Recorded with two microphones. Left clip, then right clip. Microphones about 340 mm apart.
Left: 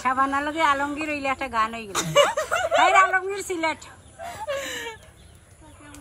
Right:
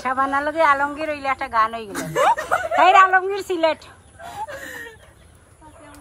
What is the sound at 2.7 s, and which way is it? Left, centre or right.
Speech, centre.